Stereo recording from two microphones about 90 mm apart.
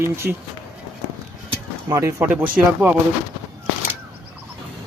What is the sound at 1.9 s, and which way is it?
Speech, 35° right (ahead or behind).